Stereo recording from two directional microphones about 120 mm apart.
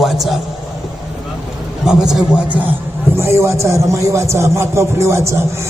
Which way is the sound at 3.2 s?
20° right (ahead or behind).